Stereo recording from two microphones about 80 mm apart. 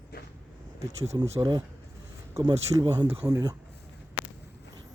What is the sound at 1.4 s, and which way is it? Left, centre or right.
Speech, right.